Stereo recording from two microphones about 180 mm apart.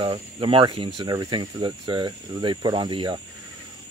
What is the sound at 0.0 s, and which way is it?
Speech, 30° right (ahead or behind).